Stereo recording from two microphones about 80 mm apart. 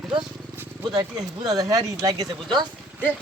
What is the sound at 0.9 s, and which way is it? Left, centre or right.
Speech, right.